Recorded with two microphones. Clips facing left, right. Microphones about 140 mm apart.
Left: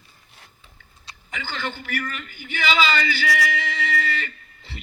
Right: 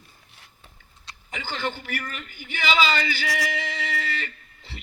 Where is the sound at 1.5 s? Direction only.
40° right (ahead or behind).